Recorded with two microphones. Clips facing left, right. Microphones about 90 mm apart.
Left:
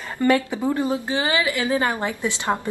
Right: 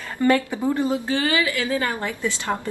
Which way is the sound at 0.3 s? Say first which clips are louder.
Even; 15° left (ahead or behind).